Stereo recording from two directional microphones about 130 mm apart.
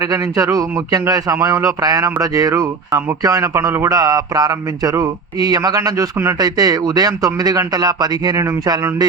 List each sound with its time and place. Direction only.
0.0 s speech: 25° right (ahead or behind)